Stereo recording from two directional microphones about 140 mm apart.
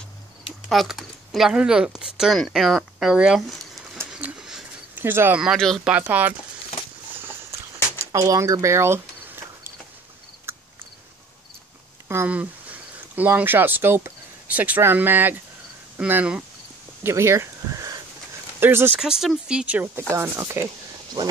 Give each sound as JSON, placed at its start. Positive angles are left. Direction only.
{"t": 0.7, "sound": "speech", "side_deg": 0}
{"t": 4.1, "sound": "a sound", "side_deg": -10}
{"t": 5.0, "sound": "speech", "side_deg": -15}
{"t": 5.4, "sound": "speech", "side_deg": 0}
{"t": 5.9, "sound": "speech", "side_deg": -10}
{"t": 8.0, "sound": "a sound", "side_deg": -20}
{"t": 10.5, "sound": "cricket", "side_deg": -20}
{"t": 12.1, "sound": "speech", "side_deg": -15}
{"t": 17.0, "sound": "a sound", "side_deg": -20}
{"t": 18.6, "sound": "speech", "side_deg": -15}
{"t": 18.9, "sound": "speech", "side_deg": -5}